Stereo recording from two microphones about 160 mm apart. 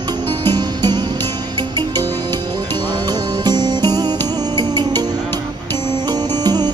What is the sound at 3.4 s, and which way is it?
Music, 25° right (ahead or behind).